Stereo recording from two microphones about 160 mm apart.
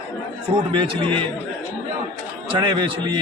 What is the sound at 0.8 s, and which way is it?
Speech, 35° right (ahead or behind).